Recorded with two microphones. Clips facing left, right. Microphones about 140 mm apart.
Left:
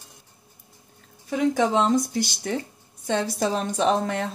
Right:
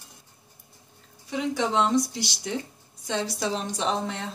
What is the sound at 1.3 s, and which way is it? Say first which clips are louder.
A woman's voice: left 5 dB; 50° left (ahead or behind).